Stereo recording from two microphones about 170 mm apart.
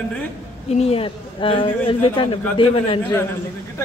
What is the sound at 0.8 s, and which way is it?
A man's voice, 35° left (ahead or behind).